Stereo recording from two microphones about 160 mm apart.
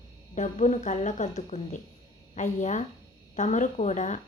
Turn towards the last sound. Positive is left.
turn(degrees=50)  # may be behind; listen again after turning